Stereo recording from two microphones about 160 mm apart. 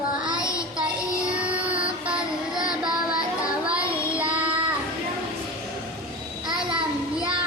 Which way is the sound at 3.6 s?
10° right (ahead or behind).